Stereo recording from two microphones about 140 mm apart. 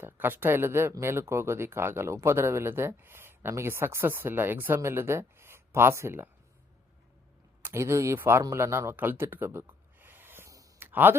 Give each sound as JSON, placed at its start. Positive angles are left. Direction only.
{"t": 0.0, "sound": "speech", "side_deg": -15}
{"t": 7.6, "sound": "speech", "side_deg": -20}